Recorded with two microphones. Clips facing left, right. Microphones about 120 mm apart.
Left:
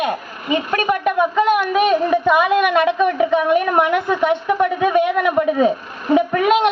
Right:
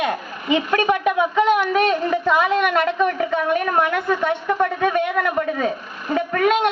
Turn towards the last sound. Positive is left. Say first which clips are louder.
# left 4 dB
turn(degrees=15)  # may be behind; listen again after turning